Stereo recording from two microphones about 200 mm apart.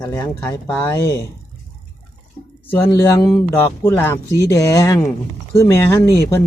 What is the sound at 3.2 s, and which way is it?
Speech, 5° left (ahead or behind).